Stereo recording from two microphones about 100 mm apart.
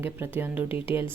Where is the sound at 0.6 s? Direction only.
65° left (ahead or behind).